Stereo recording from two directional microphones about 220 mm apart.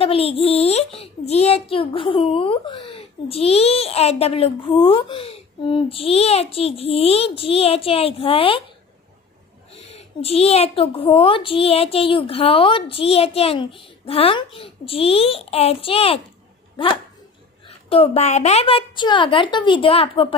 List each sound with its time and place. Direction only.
0.0 s a child's voice: 25° left (ahead or behind)
9.7 s a child's voice: 25° left (ahead or behind)
17.6 s a child's voice: 25° left (ahead or behind)